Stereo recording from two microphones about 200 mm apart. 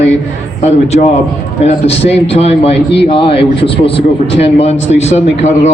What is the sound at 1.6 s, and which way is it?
Speech, 30° left (ahead or behind).